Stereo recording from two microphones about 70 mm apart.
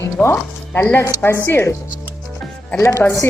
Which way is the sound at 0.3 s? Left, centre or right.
Left.